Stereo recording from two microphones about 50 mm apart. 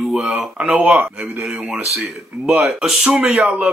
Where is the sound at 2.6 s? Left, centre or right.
Centre.